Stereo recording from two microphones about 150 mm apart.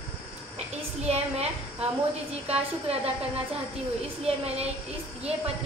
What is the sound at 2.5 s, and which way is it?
A woman's voice, 40° right (ahead or behind).